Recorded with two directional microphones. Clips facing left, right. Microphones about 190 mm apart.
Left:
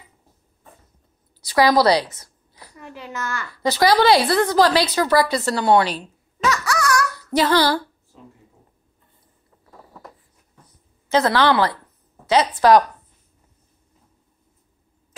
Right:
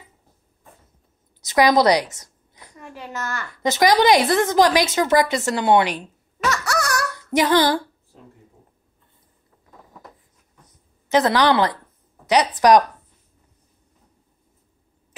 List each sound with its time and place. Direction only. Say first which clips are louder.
1.4 s a woman's voice: even; 20° right (ahead or behind)
2.1 s a sound: left 1 dB; 20° right (ahead or behind)
2.8 s a child's voice: even; 45° right (ahead or behind)
3.5 s a woman's voice: even; 20° right (ahead or behind)
6.4 s a sound: left 1 dB; 45° right (ahead or behind)
7.2 s child singing: right 3 dB; 20° right (ahead or behind)
11.1 s a woman's voice: even; 20° right (ahead or behind)